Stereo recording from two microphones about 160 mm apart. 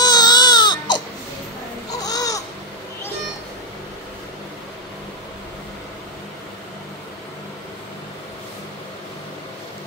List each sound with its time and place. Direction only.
0.0 s baby cry: 25° left (ahead or behind)
1.9 s babbling: 25° left (ahead or behind)